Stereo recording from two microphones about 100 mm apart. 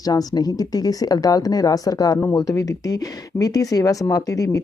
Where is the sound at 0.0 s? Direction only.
40° left (ahead or behind).